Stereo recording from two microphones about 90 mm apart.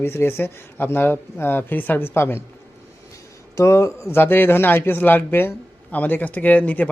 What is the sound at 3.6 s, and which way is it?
A man's voice, 35° left (ahead or behind).